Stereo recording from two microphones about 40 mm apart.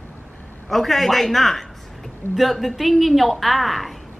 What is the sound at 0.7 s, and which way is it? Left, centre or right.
A man's voice, centre.